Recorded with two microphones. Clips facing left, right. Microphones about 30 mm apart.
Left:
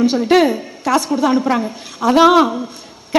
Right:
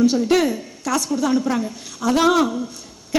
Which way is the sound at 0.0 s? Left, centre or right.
Left.